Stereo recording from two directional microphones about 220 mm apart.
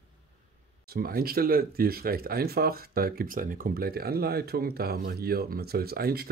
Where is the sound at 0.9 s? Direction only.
45° right (ahead or behind).